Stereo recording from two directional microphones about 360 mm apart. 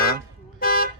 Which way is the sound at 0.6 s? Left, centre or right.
Left.